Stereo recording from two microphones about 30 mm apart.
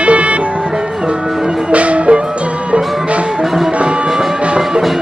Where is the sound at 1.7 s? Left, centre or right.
Right.